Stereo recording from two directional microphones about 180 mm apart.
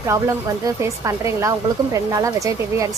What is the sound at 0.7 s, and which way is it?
A woman's voice, 15° right (ahead or behind).